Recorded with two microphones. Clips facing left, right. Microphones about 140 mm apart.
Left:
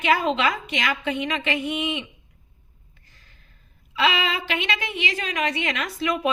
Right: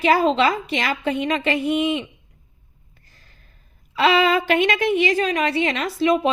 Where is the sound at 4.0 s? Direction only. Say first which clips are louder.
Right 7 dB; 40° right (ahead or behind).